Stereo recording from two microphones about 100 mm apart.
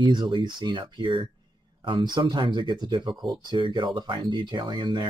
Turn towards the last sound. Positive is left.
turn(degrees=-50)  # may be behind; listen again after turning